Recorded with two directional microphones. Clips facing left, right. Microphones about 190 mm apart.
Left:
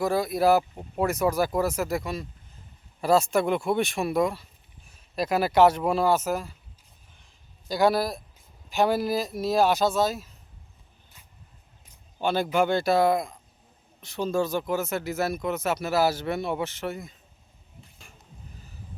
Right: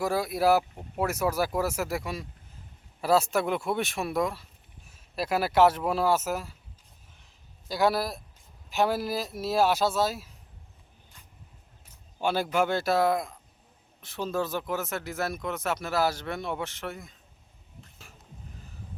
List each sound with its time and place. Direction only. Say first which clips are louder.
0.0 s speech: left 3 dB; 5° right (ahead or behind)
7.7 s speech: left 3 dB; centre (ahead or behind)
12.2 s speech: left 2 dB; 10° right (ahead or behind)
17.9 s vehicle: even; centre (ahead or behind)